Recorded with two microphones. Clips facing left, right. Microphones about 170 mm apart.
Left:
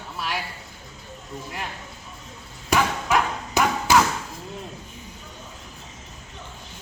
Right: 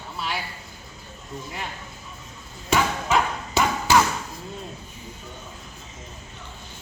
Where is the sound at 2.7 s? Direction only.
Centre (ahead or behind).